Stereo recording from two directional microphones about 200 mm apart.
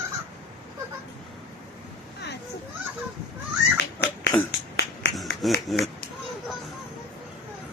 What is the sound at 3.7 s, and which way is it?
Pig, 55° left (ahead or behind).